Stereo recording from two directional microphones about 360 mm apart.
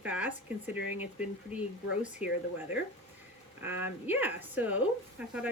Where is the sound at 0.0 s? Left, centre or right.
Centre.